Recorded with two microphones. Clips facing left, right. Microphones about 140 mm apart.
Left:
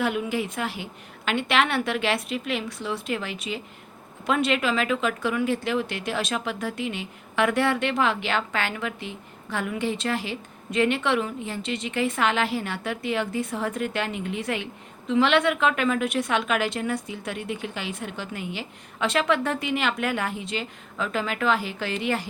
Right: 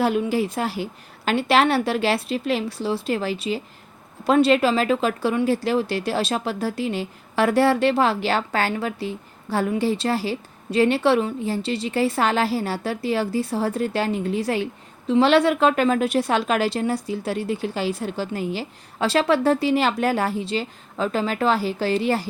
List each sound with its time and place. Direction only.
0.0 s speech: 35° right (ahead or behind)